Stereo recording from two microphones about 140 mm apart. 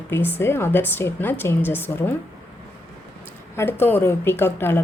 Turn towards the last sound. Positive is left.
turn(degrees=15)  # may be behind; listen again after turning